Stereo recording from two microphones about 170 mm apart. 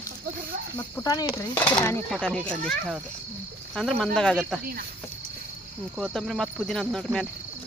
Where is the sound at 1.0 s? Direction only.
25° left (ahead or behind); by 4.6 s 5° left (ahead or behind).